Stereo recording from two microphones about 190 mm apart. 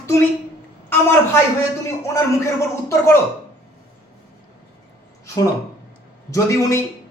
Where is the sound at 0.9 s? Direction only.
10° left (ahead or behind).